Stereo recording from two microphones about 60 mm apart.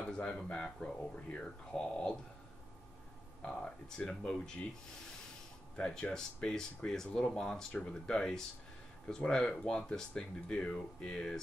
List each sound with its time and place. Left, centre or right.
0.1 s speech: centre
3.4 s speech: centre
5.8 s speech: centre